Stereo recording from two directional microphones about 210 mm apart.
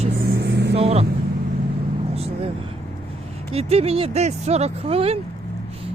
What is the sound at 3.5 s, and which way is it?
Speech, 30° right (ahead or behind).